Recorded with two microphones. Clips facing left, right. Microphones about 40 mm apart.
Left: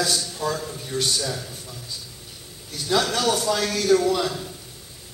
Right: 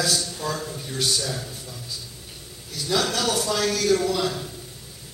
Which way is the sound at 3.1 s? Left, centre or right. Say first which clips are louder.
Left 2 dB; centre.